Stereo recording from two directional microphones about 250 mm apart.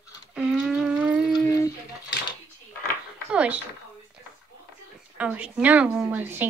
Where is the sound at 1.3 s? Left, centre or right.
Centre.